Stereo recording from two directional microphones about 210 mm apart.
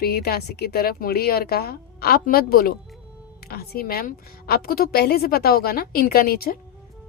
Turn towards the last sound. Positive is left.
turn(degrees=45)  # may be behind; listen again after turning